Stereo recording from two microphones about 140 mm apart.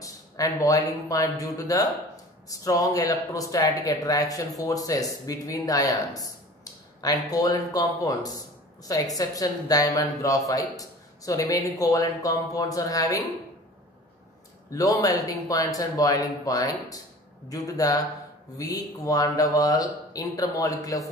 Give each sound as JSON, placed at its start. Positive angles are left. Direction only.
{"t": 0.0, "sound": "speech", "side_deg": 25}
{"t": 14.7, "sound": "speech", "side_deg": 25}